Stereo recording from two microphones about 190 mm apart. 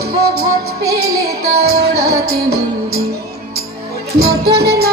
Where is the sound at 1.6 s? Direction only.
55° right (ahead or behind).